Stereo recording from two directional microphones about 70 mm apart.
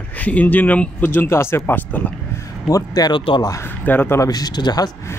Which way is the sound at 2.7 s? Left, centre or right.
Left.